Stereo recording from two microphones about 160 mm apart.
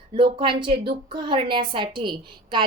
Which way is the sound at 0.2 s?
30° right (ahead or behind).